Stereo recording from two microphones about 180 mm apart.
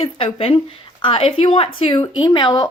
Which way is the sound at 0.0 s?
30° left (ahead or behind).